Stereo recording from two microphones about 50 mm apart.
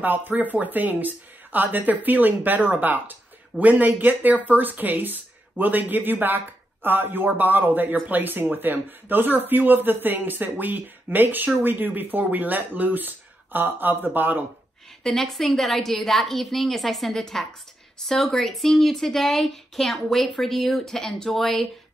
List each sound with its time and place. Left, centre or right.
0.0 s speech: right
15.0 s speech: centre